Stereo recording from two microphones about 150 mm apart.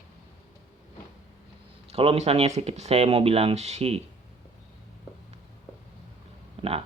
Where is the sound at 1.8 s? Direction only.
40° right (ahead or behind).